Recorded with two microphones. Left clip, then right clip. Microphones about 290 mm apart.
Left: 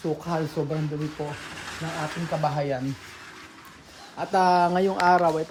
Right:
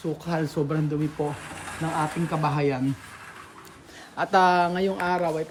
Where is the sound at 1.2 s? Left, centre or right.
Centre.